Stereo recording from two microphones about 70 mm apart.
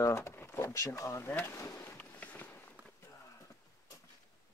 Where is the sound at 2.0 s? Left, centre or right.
Left.